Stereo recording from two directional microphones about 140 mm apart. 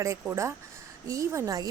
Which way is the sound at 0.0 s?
20° right (ahead or behind).